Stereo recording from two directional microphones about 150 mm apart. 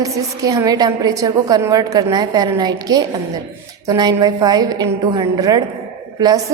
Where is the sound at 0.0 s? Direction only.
25° right (ahead or behind).